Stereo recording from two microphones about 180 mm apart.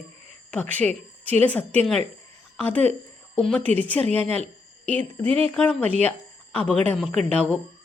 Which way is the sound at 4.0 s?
35° right (ahead or behind).